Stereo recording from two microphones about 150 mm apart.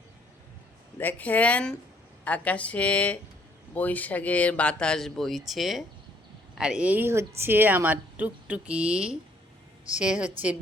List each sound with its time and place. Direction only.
0.9 s a woman's voice: 10° left (ahead or behind); by 10.2 s 5° right (ahead or behind)